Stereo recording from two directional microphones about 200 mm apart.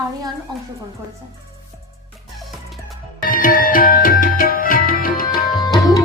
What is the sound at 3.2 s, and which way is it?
Tabla, 45° left (ahead or behind).